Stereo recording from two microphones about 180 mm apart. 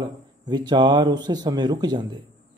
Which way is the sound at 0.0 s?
25° right (ahead or behind).